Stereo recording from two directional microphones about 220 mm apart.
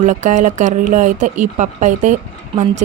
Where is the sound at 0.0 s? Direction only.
35° right (ahead or behind).